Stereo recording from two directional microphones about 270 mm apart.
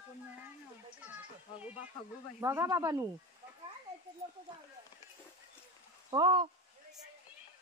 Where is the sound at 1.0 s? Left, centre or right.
Centre.